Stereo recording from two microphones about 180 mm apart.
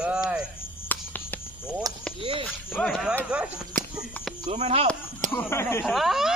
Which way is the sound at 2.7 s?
Centre (ahead or behind).